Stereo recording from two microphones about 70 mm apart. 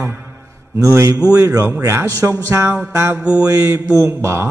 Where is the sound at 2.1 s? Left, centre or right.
Right.